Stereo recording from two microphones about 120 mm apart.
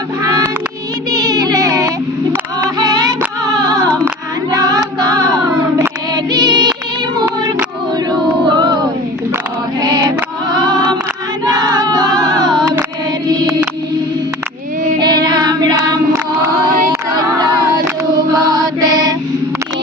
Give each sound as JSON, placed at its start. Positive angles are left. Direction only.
{"t": 0.2, "sound": "child singing", "side_deg": -30}
{"t": 3.4, "sound": "music", "side_deg": -30}
{"t": 4.5, "sound": "choir", "side_deg": -30}
{"t": 4.9, "sound": "music", "side_deg": -35}
{"t": 6.3, "sound": "music", "side_deg": -35}
{"t": 8.4, "sound": "a sound", "side_deg": -35}
{"t": 9.8, "sound": "choir", "side_deg": -35}
{"t": 10.5, "sound": "a sound", "side_deg": -35}
{"t": 11.4, "sound": "child singing", "side_deg": -35}
{"t": 13.3, "sound": "music", "side_deg": -30}
{"t": 14.9, "sound": "child singing", "side_deg": -35}
{"t": 16.6, "sound": "female singing", "side_deg": -30}
{"t": 18.3, "sound": "mantra", "side_deg": -30}